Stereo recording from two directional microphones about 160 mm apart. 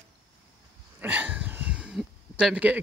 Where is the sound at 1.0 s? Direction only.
10° right (ahead or behind).